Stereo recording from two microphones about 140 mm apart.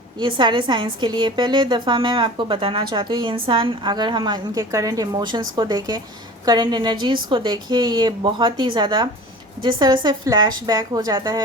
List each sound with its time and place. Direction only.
0.2 s a woman's voice: 35° right (ahead or behind)